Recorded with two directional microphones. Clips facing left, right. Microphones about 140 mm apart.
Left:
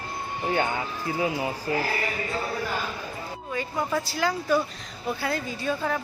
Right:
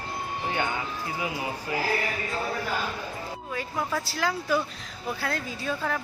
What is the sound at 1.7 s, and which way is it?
Speech, 30° left (ahead or behind).